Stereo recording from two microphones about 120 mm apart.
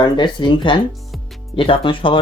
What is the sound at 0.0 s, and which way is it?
Speech, 40° left (ahead or behind).